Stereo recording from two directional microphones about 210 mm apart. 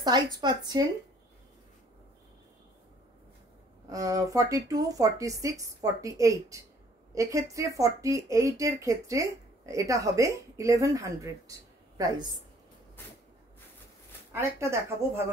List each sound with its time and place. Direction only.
0.0 s speech: 20° right (ahead or behind)
3.9 s speech: 15° right (ahead or behind)
14.3 s speech: 10° right (ahead or behind)